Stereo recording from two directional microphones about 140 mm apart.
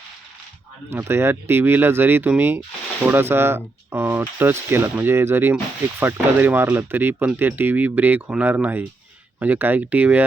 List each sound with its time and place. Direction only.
0.9 s speech: 20° right (ahead or behind)